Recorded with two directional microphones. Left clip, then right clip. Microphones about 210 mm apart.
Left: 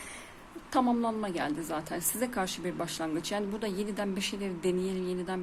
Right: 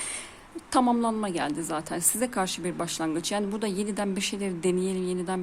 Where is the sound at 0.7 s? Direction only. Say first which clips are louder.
Right 4 dB; 25° right (ahead or behind).